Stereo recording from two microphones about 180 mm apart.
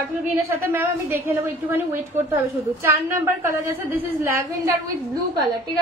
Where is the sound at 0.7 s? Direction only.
10° right (ahead or behind).